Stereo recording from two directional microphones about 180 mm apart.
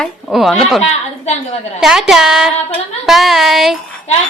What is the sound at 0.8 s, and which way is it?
Speech, 35° left (ahead or behind).